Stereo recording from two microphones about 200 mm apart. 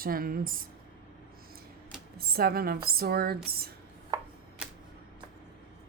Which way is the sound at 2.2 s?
50° right (ahead or behind).